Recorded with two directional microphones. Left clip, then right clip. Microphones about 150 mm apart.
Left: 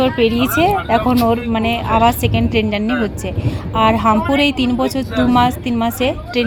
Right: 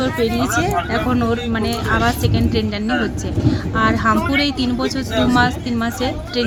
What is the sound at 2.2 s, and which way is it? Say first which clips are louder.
Speech: left 3 dB; 15° left (ahead or behind).